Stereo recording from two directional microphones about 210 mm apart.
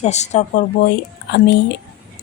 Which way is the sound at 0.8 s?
55° left (ahead or behind).